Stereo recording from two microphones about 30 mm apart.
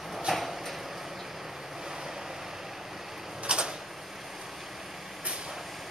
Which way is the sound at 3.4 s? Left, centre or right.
Right.